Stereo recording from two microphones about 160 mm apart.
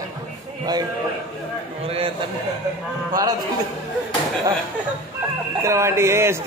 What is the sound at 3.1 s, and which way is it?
Speech, 25° right (ahead or behind).